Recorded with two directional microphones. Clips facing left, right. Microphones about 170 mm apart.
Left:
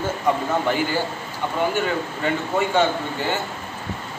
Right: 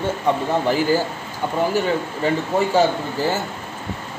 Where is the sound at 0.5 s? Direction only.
35° right (ahead or behind).